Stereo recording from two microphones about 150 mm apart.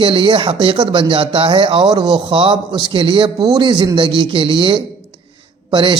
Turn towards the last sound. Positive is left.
turn(degrees=-35)  # may be behind; listen again after turning